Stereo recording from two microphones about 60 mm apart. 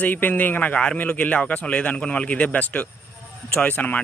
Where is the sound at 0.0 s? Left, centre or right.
Left.